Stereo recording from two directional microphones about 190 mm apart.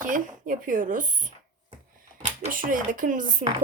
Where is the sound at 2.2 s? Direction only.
40° right (ahead or behind).